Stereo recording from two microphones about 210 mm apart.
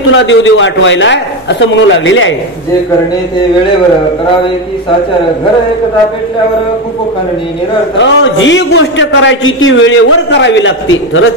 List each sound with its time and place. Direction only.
0.1 s a man's voice: 60° left (ahead or behind)
8.0 s a man's voice: 60° left (ahead or behind)